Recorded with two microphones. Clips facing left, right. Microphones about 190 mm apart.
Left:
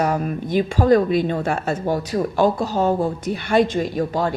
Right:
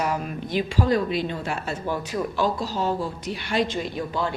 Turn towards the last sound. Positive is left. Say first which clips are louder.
# left 6 dB
turn(degrees=45)  # may be behind; listen again after turning